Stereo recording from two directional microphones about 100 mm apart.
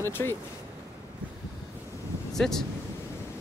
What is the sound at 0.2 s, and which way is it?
Speech, 25° left (ahead or behind).